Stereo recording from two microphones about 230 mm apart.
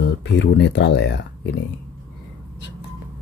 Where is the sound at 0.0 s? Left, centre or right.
Left.